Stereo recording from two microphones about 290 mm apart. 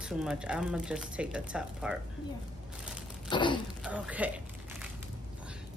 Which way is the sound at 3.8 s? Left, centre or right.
Centre.